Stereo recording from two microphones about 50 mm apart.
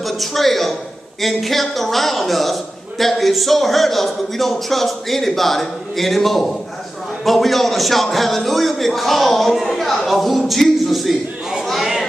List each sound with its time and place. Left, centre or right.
0.0 s a man's voice: centre